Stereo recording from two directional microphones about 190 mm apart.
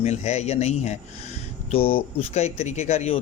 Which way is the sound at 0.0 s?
35° left (ahead or behind).